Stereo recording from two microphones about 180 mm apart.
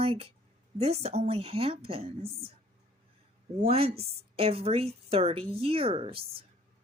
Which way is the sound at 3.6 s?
35° right (ahead or behind).